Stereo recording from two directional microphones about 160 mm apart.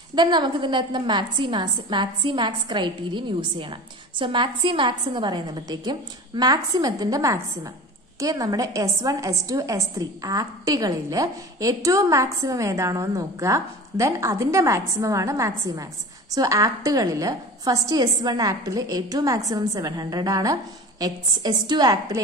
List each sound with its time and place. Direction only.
0.1 s a woman's voice: 25° right (ahead or behind)